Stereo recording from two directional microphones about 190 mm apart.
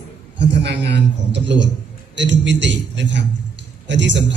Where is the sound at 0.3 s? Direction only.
65° right (ahead or behind).